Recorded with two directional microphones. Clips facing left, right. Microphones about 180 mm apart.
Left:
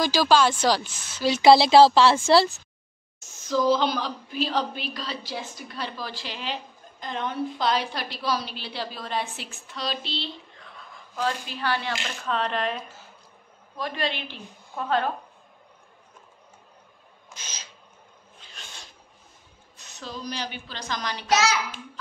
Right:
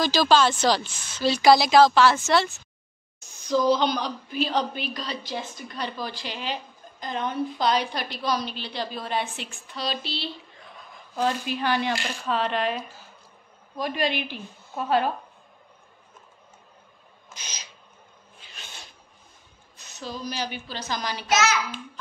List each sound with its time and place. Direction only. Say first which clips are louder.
0.0 s speech: even; 10° left (ahead or behind)
1.4 s a woman's voice: left 2 dB; 30° left (ahead or behind)
3.2 s speech: right 1 dB; centre (ahead or behind)
11.1 s a woman's voice: right 3 dB; 15° right (ahead or behind)
12.3 s speech: right 1 dB; 5° right (ahead or behind)
13.7 s a woman's voice: right 3 dB; 15° right (ahead or behind)
17.3 s a sound: even; 15° right (ahead or behind)
18.4 s a sound: right 1 dB; centre (ahead or behind)
19.8 s speech: right 2 dB; centre (ahead or behind)
21.3 s a child's voice: even; 35° left (ahead or behind)